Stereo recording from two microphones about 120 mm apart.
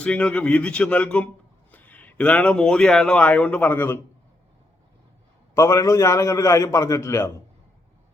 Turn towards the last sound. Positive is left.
turn(degrees=20)  # may be behind; listen again after turning